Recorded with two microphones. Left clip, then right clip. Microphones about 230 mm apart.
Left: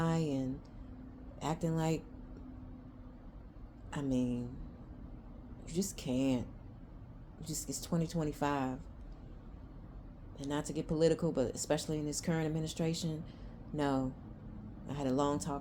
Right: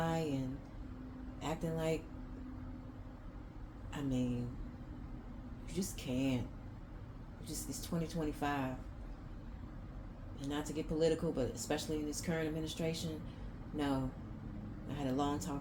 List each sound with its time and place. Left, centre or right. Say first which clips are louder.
0.0 s a sound: left 2 dB; left
3.9 s speech: left 3 dB; left
5.7 s speech: left 4 dB; left
7.4 s speech: left 3 dB; left
10.3 s speech: left 2 dB; left